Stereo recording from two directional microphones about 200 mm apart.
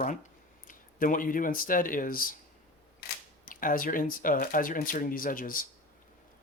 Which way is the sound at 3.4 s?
45° left (ahead or behind).